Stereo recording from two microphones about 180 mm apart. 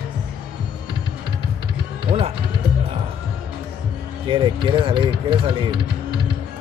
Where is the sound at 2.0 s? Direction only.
25° right (ahead or behind).